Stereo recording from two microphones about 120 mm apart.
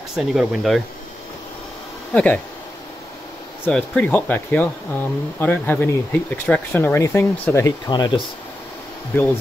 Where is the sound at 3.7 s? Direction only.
15° left (ahead or behind).